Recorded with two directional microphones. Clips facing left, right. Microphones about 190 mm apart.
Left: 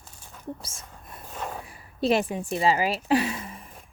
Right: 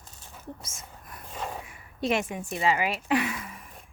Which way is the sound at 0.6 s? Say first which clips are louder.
Left 1 dB; 30° left (ahead or behind).